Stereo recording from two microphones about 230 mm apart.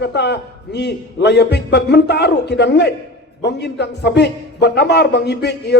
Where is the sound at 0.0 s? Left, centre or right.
Left.